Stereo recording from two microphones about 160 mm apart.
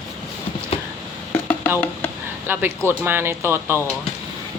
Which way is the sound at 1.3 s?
10° left (ahead or behind).